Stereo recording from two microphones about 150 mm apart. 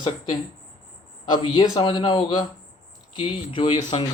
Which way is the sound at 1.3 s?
30° left (ahead or behind).